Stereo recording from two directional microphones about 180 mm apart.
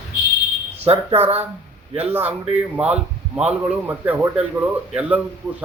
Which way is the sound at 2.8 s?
5° right (ahead or behind).